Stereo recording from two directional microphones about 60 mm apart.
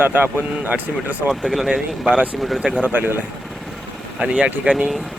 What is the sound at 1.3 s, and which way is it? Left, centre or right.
Speech, centre.